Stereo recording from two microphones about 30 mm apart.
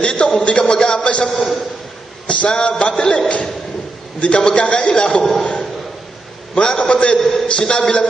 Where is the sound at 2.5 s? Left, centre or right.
Left.